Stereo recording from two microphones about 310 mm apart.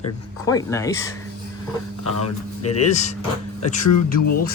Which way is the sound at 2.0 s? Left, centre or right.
Left.